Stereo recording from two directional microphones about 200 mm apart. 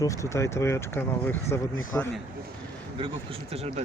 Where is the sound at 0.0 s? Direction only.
15° left (ahead or behind).